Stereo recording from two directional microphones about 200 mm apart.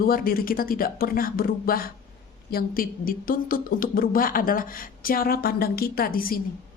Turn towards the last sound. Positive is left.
turn(degrees=45)  # may be behind; listen again after turning